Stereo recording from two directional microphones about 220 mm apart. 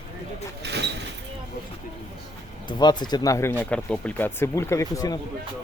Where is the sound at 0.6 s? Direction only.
50° right (ahead or behind).